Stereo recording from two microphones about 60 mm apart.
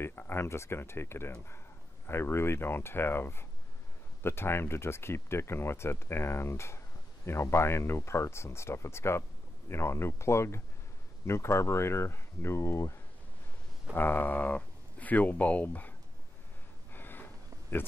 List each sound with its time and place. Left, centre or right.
0.0 s speech: left
13.9 s speech: left
16.9 s a sound: left